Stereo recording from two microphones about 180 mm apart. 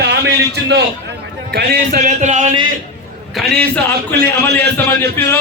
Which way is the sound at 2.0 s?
40° right (ahead or behind).